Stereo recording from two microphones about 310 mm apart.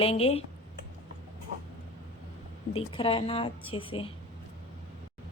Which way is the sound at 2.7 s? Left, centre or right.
Centre.